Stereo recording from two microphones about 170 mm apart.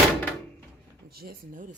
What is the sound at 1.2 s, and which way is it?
Speech, 60° right (ahead or behind).